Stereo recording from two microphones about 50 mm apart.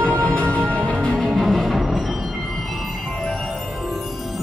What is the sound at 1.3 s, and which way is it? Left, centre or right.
Music, centre.